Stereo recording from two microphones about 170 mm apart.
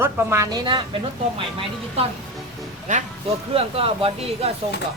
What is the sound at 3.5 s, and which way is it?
Speech, 35° right (ahead or behind).